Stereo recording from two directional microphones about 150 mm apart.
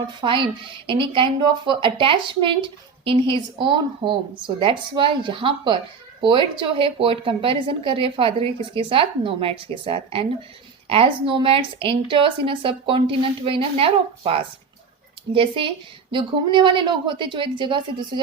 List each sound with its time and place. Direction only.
0.2 s a woman's voice: 35° right (ahead or behind)